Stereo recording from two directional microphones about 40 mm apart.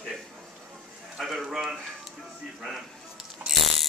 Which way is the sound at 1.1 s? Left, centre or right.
Centre.